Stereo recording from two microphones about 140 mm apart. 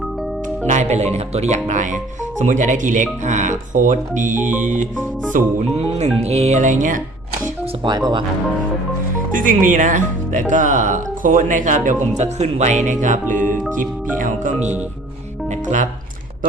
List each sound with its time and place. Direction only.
0.7 s speech: 55° right (ahead or behind)
5.7 s speech: 45° right (ahead or behind); by 7.0 s 65° right (ahead or behind)
7.9 s speech: 30° right (ahead or behind)
9.3 s speech: 70° right (ahead or behind)
13.3 s speech: 15° left (ahead or behind)
14.2 s speech: 65° right (ahead or behind)